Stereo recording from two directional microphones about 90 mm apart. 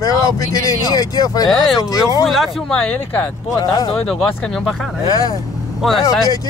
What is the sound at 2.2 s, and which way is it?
Speech, centre (ahead or behind).